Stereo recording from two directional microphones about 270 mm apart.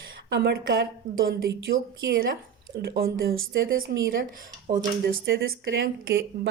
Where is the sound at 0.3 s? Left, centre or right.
Right.